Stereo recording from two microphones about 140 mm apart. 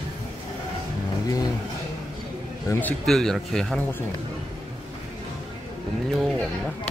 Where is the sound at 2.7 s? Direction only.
10° left (ahead or behind).